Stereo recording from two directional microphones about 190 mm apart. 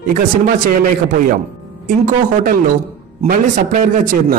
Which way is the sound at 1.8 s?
45° right (ahead or behind).